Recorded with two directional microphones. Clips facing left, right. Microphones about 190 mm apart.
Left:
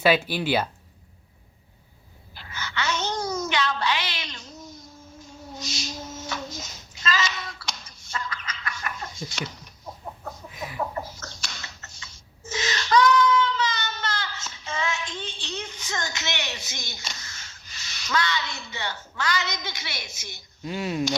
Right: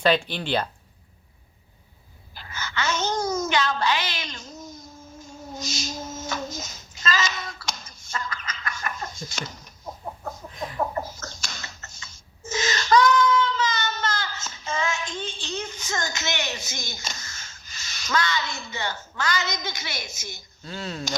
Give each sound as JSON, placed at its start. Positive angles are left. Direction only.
{"t": 0.0, "sound": "speech", "side_deg": 5}
{"t": 2.3, "sound": "babbling", "side_deg": -45}
{"t": 10.8, "sound": "a sound", "side_deg": -45}
{"t": 20.6, "sound": "speech", "side_deg": 10}